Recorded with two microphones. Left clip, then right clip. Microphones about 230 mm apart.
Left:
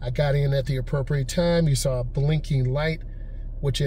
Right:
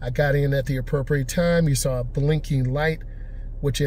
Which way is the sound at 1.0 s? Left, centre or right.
Right.